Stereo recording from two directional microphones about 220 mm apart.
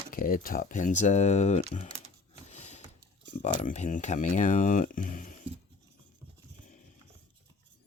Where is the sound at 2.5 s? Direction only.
30° left (ahead or behind).